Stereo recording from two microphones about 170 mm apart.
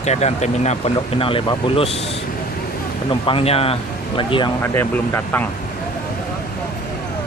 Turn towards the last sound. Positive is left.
turn(degrees=10)  # may be behind; listen again after turning